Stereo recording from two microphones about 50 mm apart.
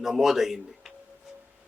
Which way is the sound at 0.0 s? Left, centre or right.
Centre.